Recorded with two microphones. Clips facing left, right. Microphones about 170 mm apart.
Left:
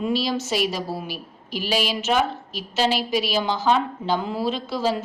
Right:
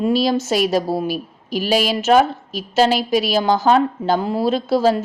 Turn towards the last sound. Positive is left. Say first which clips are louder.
# right 8 dB
turn(degrees=-40)  # may be behind; listen again after turning